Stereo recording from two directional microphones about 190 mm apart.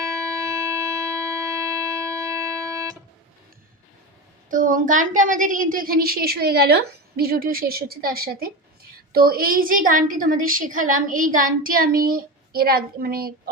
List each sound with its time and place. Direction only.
0.0 s music: 15° right (ahead or behind)
4.4 s a woman's voice: 45° right (ahead or behind)